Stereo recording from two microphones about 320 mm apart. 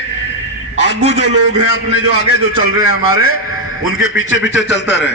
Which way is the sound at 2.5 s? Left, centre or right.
Left.